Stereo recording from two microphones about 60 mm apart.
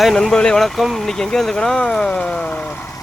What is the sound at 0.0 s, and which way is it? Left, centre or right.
Speech, centre.